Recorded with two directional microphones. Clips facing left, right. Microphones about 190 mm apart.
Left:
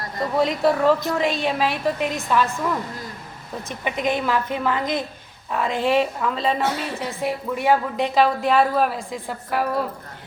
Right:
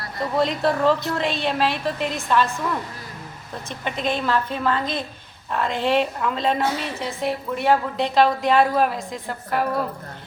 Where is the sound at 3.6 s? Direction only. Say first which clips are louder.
Left 2 dB; 15° left (ahead or behind).